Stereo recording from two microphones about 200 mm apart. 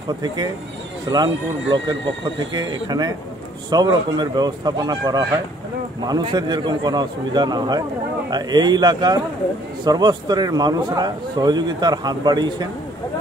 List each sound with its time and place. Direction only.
1.0 s a man's voice: 20° right (ahead or behind)